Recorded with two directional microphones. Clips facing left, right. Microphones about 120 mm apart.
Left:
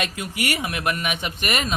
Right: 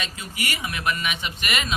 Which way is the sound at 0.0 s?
60° left (ahead or behind).